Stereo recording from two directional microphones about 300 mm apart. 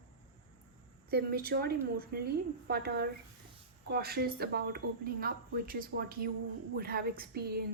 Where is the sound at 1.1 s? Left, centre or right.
Right.